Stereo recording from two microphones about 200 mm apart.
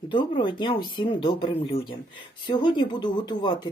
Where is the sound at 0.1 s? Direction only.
25° left (ahead or behind).